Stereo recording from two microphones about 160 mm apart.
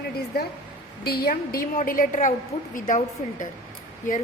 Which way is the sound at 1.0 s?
75° left (ahead or behind).